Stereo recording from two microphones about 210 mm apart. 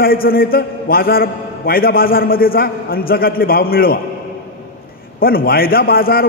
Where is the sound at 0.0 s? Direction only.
45° left (ahead or behind).